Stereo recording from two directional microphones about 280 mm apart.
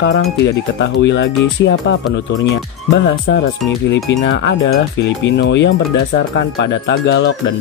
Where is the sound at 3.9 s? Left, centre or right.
Left.